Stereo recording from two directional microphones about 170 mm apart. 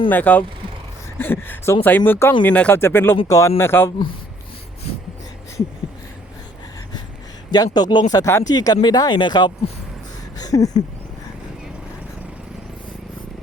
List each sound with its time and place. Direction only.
0.1 s speech: 10° left (ahead or behind)
7.5 s speech: 25° left (ahead or behind)
10.3 s a sound: 20° left (ahead or behind)